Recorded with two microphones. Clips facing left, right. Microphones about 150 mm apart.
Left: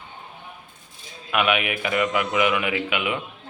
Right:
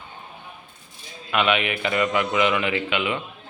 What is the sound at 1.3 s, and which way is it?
Speech, 10° left (ahead or behind).